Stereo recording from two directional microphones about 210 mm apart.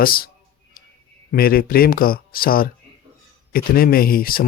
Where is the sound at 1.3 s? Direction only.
45° left (ahead or behind).